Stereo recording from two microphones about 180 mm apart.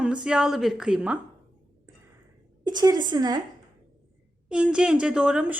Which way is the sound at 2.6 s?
20° right (ahead or behind).